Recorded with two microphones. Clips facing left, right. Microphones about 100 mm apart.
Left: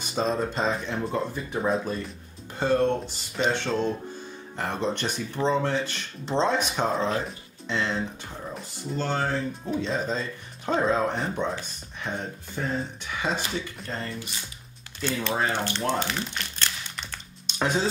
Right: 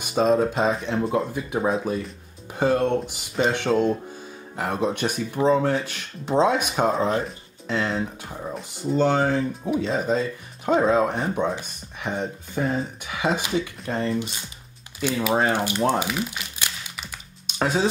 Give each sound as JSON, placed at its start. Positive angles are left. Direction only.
{"t": 0.1, "sound": "speech", "side_deg": -5}
{"t": 8.9, "sound": "speech", "side_deg": -15}
{"t": 15.5, "sound": "crumpling", "side_deg": -10}